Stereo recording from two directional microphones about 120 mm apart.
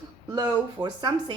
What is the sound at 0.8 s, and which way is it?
Speech, 35° right (ahead or behind).